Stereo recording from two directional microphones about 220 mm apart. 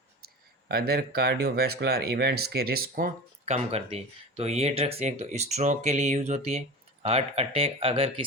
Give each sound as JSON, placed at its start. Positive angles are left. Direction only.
{"t": 0.7, "sound": "speech", "side_deg": -45}